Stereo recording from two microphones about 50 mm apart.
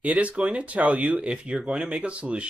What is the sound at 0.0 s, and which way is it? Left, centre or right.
Speech, right.